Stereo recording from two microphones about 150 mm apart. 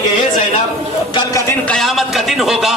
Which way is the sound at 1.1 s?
20° left (ahead or behind).